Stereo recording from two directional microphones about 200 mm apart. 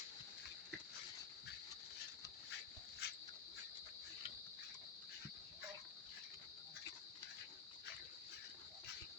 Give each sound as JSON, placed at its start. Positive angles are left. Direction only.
{"t": 3.0, "sound": "dog", "side_deg": 55}